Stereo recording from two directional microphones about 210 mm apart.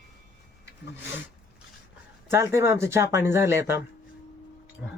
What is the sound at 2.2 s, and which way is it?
Speech, 15° right (ahead or behind).